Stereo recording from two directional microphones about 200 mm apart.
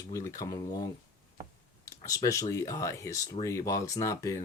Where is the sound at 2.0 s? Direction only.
15° left (ahead or behind).